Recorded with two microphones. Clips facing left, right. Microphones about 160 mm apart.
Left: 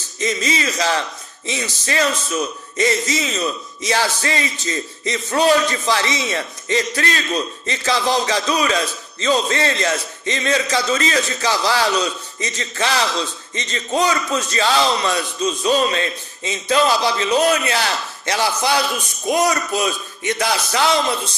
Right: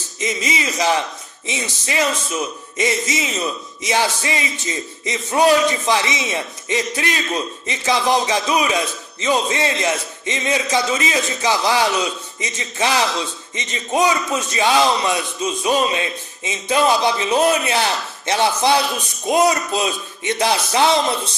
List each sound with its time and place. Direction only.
0.2 s speech: 20° right (ahead or behind)